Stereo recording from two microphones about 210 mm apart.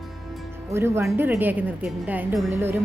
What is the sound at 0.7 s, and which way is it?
Speech, 10° right (ahead or behind).